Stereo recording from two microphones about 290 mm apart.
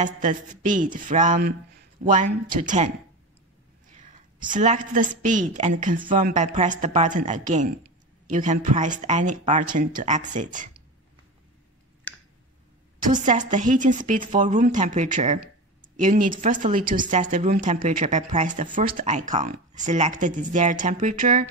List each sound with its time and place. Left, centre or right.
0.0 s speech: right
4.0 s speech: right
13.1 s speech: right